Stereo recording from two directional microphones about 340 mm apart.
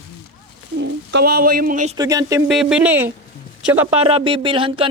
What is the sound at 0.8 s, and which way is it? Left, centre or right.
Speech, right.